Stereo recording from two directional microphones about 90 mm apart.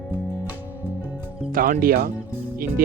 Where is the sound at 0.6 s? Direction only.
20° right (ahead or behind).